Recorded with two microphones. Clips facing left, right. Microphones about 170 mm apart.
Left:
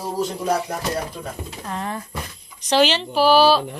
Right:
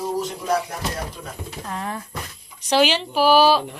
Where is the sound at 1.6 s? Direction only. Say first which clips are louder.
Left 1 dB; centre (ahead or behind).